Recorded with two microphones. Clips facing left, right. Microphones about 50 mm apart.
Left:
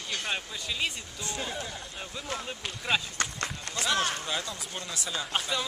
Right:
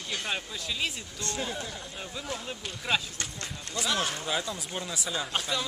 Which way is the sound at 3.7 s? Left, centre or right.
Left.